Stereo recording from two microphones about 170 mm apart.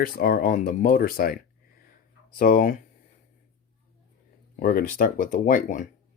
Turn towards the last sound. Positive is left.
turn(degrees=50)  # may be behind; listen again after turning